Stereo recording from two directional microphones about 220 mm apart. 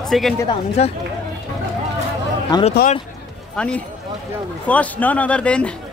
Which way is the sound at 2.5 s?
20° left (ahead or behind).